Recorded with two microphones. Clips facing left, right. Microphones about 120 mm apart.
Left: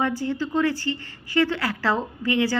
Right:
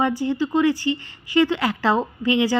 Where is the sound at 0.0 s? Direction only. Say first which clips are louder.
Right 4 dB; 15° right (ahead or behind).